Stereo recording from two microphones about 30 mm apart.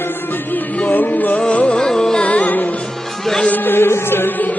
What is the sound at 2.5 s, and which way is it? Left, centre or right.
Music, left.